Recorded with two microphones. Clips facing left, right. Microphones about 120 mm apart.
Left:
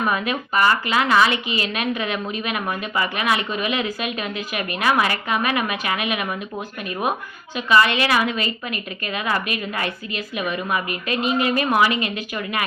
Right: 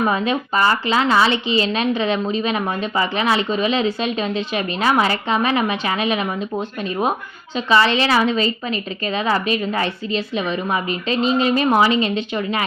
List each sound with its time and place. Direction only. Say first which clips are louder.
0.0 s a woman's voice: right 4 dB; 25° right (ahead or behind)